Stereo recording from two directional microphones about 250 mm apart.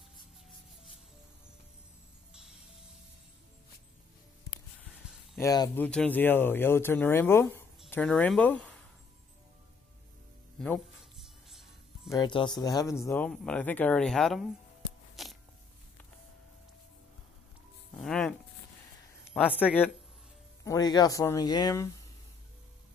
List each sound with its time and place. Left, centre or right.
5.4 s speech: centre
10.6 s music: centre
12.1 s speech: centre
15.2 s a sound: centre
17.9 s music: centre
19.3 s speech: centre